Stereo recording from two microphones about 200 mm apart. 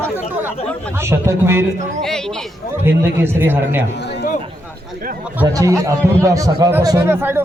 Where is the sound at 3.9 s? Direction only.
60° left (ahead or behind).